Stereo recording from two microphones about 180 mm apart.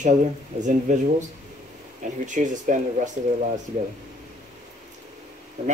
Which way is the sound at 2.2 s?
45° right (ahead or behind).